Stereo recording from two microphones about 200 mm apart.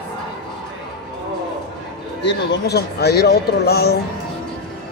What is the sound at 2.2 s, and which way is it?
Speech, 60° left (ahead or behind).